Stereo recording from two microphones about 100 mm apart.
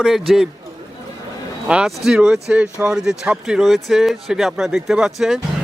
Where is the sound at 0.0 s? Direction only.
5° right (ahead or behind).